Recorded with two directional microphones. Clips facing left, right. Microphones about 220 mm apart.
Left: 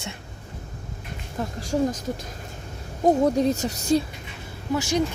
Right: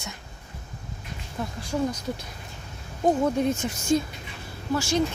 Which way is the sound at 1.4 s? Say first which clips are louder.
Left 3 dB; 45° left (ahead or behind).